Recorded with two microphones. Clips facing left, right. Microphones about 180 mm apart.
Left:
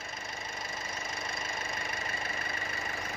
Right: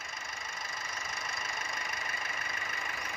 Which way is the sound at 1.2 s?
30° left (ahead or behind).